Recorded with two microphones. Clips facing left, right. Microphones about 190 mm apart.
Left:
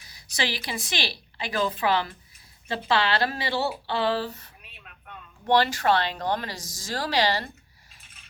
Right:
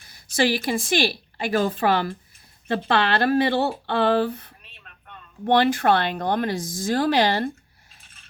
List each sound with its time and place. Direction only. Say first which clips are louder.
0.0 s a woman's voice: right 9 dB; 55° right (ahead or behind)
4.6 s a sound: left 1 dB; 5° left (ahead or behind)
5.5 s speech: right 3 dB; 55° right (ahead or behind)